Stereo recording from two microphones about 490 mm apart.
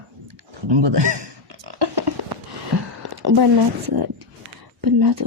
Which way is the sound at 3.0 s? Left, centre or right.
Right.